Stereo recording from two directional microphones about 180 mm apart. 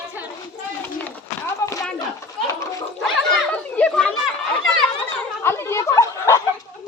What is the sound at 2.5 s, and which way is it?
Gargling, 15° left (ahead or behind).